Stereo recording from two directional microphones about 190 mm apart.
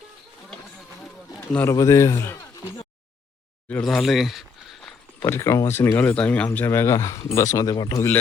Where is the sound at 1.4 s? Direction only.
10° left (ahead or behind).